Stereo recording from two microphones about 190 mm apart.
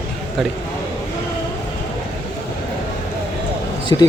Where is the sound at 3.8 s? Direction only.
20° left (ahead or behind).